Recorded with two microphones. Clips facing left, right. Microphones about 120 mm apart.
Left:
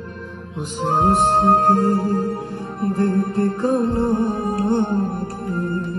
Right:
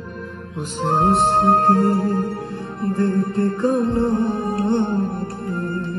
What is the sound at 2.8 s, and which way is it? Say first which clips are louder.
Music: left 1 dB; 25° left (ahead or behind).